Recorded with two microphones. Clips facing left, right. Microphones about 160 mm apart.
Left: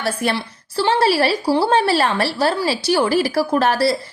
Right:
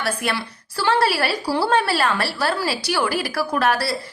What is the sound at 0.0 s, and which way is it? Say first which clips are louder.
A woman's voice: left 3 dB; 30° left (ahead or behind).